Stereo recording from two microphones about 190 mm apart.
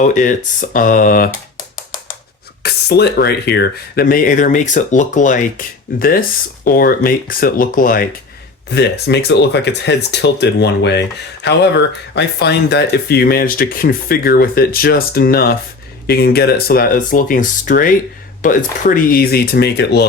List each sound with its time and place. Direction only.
0.1 s speech: 40° left (ahead or behind)
8.7 s speech: 60° left (ahead or behind)